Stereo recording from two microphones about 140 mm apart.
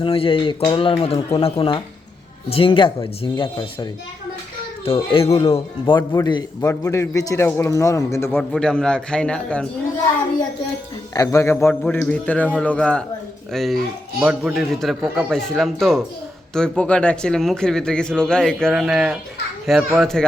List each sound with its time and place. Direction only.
0.0 s speech: 40° left (ahead or behind)
4.9 s a man's voice: 40° left (ahead or behind); by 8.4 s 20° left (ahead or behind)
8.4 s speech: 5° left (ahead or behind)
11.1 s a man's voice: 25° left (ahead or behind)
11.7 s a man's voice: 10° left (ahead or behind)